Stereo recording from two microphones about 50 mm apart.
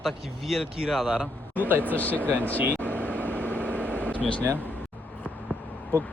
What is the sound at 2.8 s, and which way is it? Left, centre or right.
Vehicle, left.